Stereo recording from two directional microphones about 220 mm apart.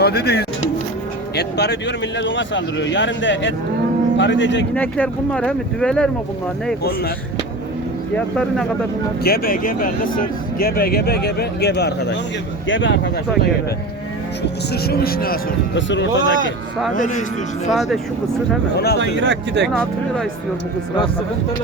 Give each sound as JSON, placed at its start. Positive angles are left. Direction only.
{"t": 0.0, "sound": "speech", "side_deg": 45}
{"t": 4.7, "sound": "speech", "side_deg": 5}
{"t": 8.1, "sound": "speech", "side_deg": 5}
{"t": 9.2, "sound": "speech", "side_deg": 45}
{"t": 14.4, "sound": "speech", "side_deg": 45}
{"t": 16.9, "sound": "speech", "side_deg": 35}
{"t": 17.7, "sound": "speech", "side_deg": 0}
{"t": 18.9, "sound": "speech", "side_deg": -55}
{"t": 19.6, "sound": "speech", "side_deg": 0}